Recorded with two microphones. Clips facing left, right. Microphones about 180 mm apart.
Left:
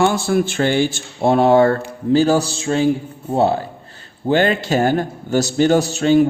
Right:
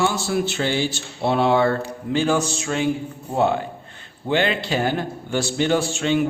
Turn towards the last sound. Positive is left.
turn(degrees=40)  # may be behind; listen again after turning